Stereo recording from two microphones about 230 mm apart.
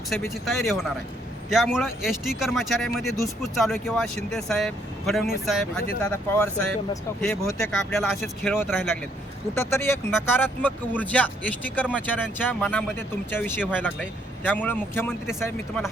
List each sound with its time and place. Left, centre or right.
0.4 s speech: centre
7.9 s speech: centre
9.6 s speech: centre